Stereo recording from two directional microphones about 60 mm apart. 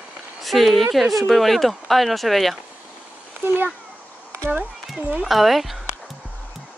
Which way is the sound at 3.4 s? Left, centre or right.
Right.